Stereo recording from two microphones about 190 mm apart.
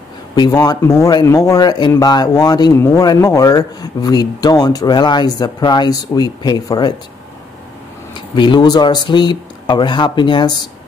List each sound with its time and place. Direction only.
0.4 s speech: 20° left (ahead or behind)
8.4 s speech: 25° left (ahead or behind)